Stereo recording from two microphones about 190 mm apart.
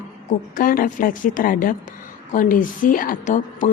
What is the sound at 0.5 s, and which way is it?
A woman's voice, 45° left (ahead or behind).